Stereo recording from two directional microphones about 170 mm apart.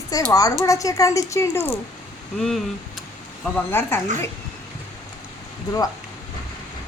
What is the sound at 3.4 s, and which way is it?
Speech, 15° left (ahead or behind).